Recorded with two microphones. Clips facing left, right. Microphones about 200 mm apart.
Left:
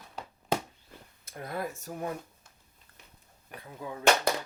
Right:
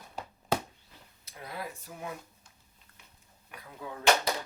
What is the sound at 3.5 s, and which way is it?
Speech, 25° left (ahead or behind).